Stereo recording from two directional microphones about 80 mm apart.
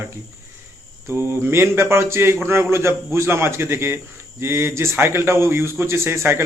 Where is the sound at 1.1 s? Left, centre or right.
Right.